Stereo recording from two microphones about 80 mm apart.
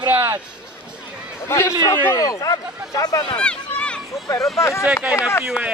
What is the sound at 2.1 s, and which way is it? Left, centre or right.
Speech, left.